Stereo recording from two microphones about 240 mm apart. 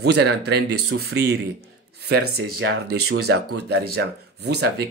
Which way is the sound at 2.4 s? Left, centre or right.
Right.